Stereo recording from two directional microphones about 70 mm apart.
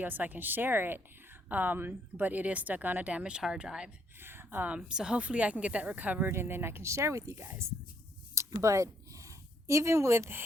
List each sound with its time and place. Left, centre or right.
0.0 s speech: right
4.2 s speech: right
6.2 s speech: right
8.4 s a sound: right
9.6 s speech: right